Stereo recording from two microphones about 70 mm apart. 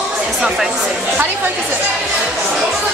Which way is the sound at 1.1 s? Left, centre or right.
Right.